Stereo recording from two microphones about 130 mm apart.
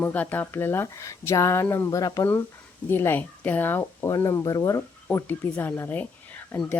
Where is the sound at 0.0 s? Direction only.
15° left (ahead or behind).